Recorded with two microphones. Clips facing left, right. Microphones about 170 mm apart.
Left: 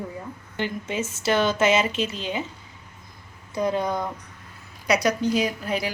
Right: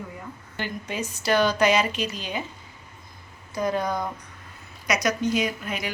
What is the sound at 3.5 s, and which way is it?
A woman's voice, 25° left (ahead or behind).